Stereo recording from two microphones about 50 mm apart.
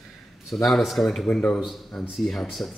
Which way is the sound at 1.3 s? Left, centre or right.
Left.